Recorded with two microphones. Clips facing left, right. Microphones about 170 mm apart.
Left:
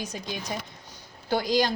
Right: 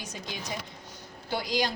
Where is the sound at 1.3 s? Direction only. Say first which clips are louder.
Left 5 dB; 45° left (ahead or behind).